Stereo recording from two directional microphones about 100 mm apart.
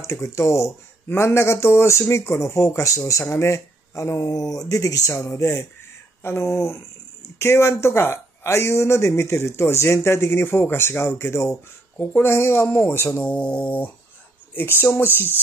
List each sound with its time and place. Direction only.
0.0 s speech: 30° left (ahead or behind)
13.2 s speech: 10° left (ahead or behind)